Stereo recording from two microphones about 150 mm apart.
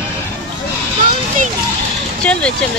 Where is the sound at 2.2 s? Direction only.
5° left (ahead or behind).